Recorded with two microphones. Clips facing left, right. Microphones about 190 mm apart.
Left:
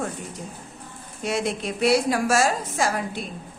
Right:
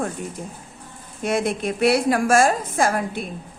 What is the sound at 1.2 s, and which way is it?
A woman's voice, 55° right (ahead or behind).